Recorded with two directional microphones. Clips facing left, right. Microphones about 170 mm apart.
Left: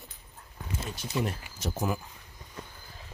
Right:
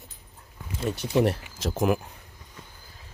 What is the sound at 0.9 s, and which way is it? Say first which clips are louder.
Speech: right 9 dB; 70° right (ahead or behind).